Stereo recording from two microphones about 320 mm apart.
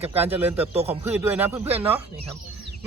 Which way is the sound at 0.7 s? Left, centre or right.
Centre.